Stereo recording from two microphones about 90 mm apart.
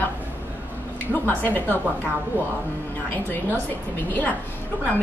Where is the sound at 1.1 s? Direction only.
20° left (ahead or behind).